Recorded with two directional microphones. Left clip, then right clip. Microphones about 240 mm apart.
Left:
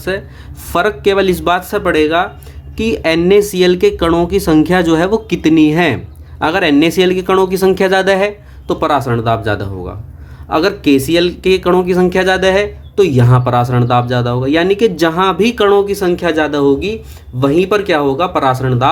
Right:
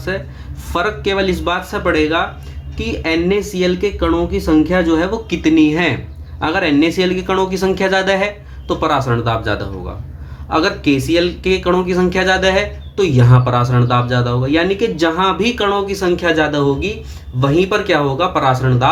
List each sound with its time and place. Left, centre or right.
0.1 s speech: left